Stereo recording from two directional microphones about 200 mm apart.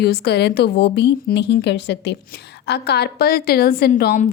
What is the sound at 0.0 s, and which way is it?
A woman's voice, 55° left (ahead or behind).